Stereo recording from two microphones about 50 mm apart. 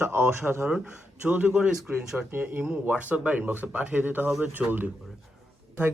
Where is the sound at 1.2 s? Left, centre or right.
Right.